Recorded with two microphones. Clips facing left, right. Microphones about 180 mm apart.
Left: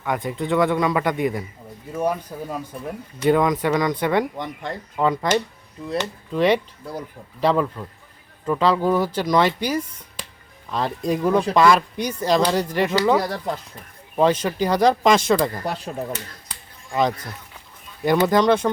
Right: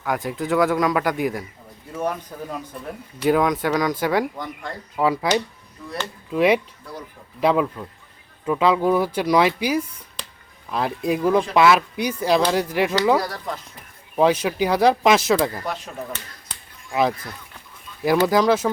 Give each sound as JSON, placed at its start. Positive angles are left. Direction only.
{"t": 0.0, "sound": "speech", "side_deg": 0}
{"t": 1.9, "sound": "speech", "side_deg": 10}
{"t": 3.2, "sound": "speech", "side_deg": 0}
{"t": 5.8, "sound": "speech", "side_deg": 25}
{"t": 6.3, "sound": "speech", "side_deg": -10}
{"t": 13.1, "sound": "speech", "side_deg": 25}
{"t": 14.2, "sound": "speech", "side_deg": -10}
{"t": 15.6, "sound": "speech", "side_deg": 35}
{"t": 16.9, "sound": "speech", "side_deg": -5}